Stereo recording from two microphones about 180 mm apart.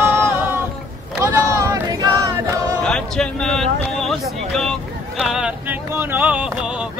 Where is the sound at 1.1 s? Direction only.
20° right (ahead or behind).